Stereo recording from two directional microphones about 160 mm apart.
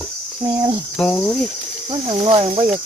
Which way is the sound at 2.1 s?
35° right (ahead or behind).